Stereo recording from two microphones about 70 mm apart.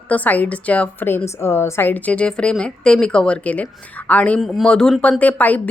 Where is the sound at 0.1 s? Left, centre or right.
Left.